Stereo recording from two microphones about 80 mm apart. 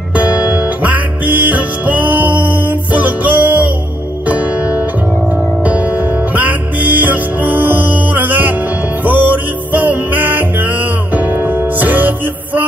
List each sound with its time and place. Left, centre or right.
0.1 s music: centre
6.3 s music: right